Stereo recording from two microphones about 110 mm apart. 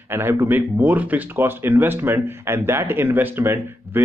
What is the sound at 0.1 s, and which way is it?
Speech, 20° right (ahead or behind).